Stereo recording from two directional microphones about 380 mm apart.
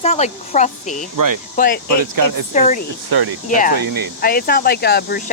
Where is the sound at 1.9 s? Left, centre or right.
Right.